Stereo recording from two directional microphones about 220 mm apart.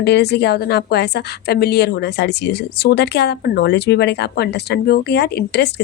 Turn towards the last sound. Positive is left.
turn(degrees=50)  # may be behind; listen again after turning